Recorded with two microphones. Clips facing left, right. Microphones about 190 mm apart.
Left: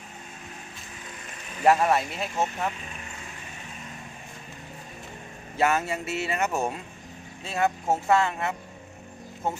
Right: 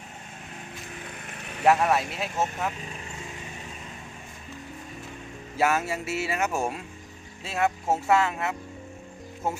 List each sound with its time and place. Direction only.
1.2 s a sound: 65° right (ahead or behind)
1.6 s speech: centre (ahead or behind)
5.5 s speech: 5° right (ahead or behind)